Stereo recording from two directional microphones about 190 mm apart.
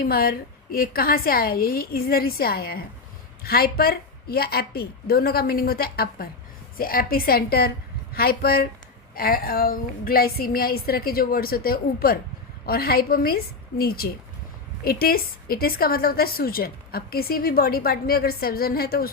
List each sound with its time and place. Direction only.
0.0 s a woman's voice: 50° left (ahead or behind)